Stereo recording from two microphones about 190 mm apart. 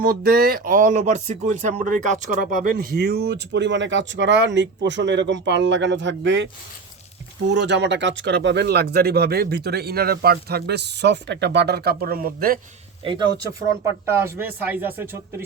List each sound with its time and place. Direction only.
0.0 s speech: 50° right (ahead or behind)
14.1 s speech: 15° right (ahead or behind)